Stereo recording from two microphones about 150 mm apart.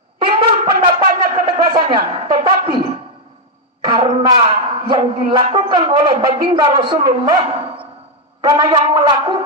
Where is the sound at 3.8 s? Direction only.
30° right (ahead or behind).